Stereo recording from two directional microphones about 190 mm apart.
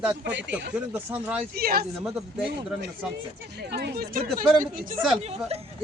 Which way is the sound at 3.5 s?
60° right (ahead or behind).